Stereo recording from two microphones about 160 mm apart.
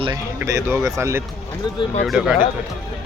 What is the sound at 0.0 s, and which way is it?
Speech, 20° right (ahead or behind).